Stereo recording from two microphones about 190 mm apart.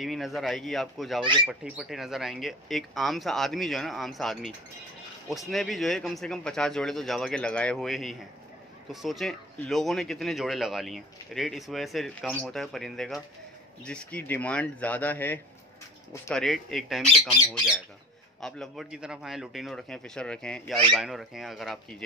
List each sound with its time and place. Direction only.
0.0 s speech: centre (ahead or behind)
1.2 s speech: 25° right (ahead or behind)
1.5 s speech: centre (ahead or behind)